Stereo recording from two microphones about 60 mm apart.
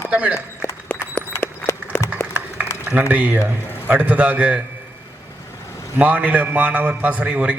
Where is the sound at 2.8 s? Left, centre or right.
Right.